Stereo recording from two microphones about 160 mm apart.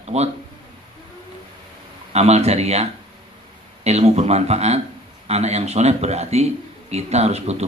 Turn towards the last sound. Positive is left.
turn(degrees=-40)  # may be behind; listen again after turning